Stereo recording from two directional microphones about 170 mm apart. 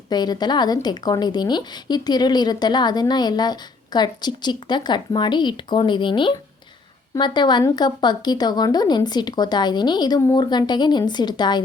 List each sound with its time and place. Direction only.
0.1 s a woman's voice: 25° left (ahead or behind)